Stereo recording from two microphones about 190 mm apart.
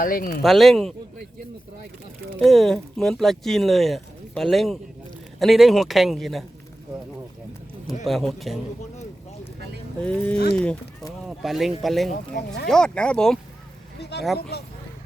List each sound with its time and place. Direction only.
0.0 s speech: 50° left (ahead or behind)
0.4 s speech: centre (ahead or behind)
2.4 s speech: centre (ahead or behind)
8.0 s speech: centre (ahead or behind)
10.0 s speech: 5° left (ahead or behind)
14.0 s speech: 60° left (ahead or behind)